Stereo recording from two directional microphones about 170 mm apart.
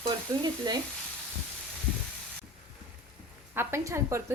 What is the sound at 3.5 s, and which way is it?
Speech, 15° right (ahead or behind).